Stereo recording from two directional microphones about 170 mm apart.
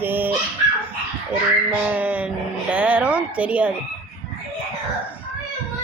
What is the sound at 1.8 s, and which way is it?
A woman's voice, 10° right (ahead or behind).